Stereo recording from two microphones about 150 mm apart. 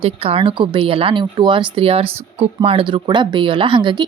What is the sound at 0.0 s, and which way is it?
A woman's voice, 35° right (ahead or behind).